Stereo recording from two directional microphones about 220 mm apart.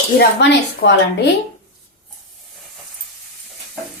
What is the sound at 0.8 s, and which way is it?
Speech, 50° left (ahead or behind).